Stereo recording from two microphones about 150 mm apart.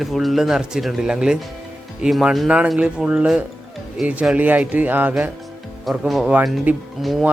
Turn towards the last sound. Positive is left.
turn(degrees=0)  # may be behind; listen again after turning